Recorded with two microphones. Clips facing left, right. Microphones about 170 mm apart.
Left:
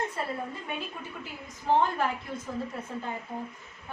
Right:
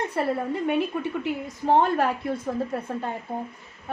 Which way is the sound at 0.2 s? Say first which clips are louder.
Right 9 dB; 70° right (ahead or behind).